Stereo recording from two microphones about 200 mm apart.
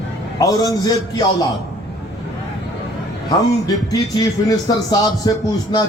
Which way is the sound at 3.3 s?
20° left (ahead or behind).